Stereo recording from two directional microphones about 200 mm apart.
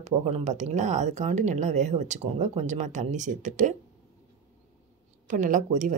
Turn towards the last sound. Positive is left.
turn(degrees=-40)  # may be behind; listen again after turning